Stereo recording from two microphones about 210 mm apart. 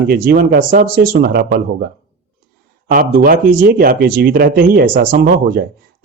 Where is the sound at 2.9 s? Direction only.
45° right (ahead or behind).